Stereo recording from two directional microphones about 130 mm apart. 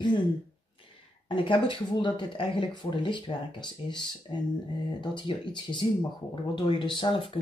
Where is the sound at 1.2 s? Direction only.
40° left (ahead or behind).